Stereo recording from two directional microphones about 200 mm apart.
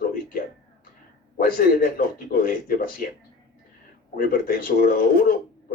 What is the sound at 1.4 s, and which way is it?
A man's voice, 45° left (ahead or behind).